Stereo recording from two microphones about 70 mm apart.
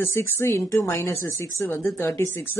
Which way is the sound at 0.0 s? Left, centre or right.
Left.